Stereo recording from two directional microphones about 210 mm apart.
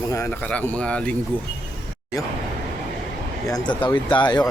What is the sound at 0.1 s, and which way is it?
A man's voice, 10° left (ahead or behind).